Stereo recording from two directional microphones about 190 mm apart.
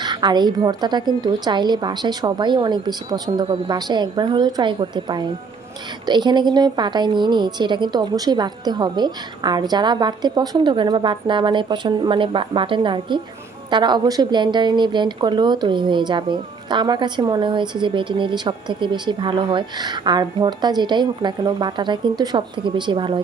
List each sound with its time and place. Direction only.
0.0 s speech: 20° right (ahead or behind)